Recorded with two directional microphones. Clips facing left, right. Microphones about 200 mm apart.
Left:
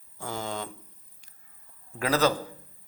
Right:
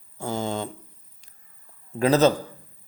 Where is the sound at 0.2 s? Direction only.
25° right (ahead or behind).